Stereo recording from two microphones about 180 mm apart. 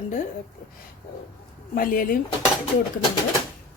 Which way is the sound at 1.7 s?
50° left (ahead or behind).